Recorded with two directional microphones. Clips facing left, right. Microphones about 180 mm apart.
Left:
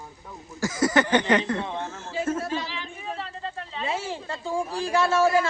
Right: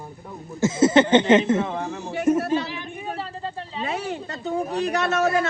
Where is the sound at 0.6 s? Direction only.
25° right (ahead or behind).